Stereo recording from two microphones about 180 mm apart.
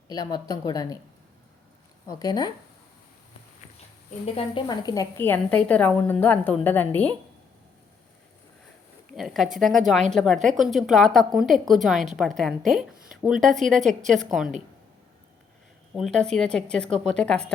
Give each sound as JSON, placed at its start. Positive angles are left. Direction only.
{"t": 0.1, "sound": "a woman's voice", "side_deg": 20}
{"t": 2.0, "sound": "a woman's voice", "side_deg": 20}
{"t": 4.4, "sound": "a woman's voice", "side_deg": 25}
{"t": 9.1, "sound": "speech", "side_deg": 0}
{"t": 16.0, "sound": "speech", "side_deg": 0}